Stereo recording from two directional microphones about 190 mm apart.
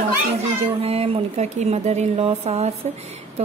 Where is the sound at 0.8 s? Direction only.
30° right (ahead or behind).